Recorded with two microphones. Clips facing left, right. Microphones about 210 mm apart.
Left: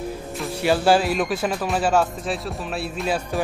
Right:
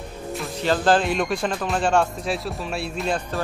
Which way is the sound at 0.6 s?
10° left (ahead or behind).